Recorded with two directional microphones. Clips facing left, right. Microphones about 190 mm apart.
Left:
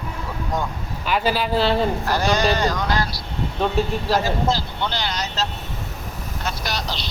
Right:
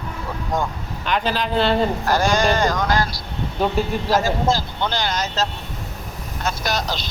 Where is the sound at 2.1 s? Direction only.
45° right (ahead or behind).